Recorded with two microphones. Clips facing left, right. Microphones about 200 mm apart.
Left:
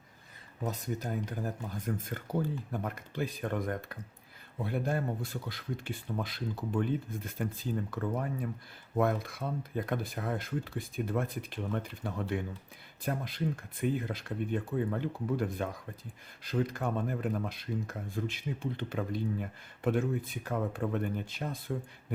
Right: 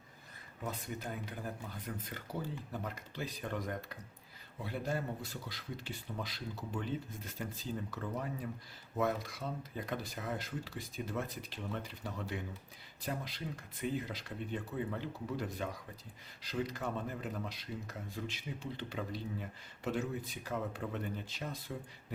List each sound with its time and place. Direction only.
0.6 s speech: 40° left (ahead or behind)